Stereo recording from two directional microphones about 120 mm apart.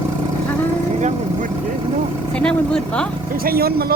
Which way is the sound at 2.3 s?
10° left (ahead or behind).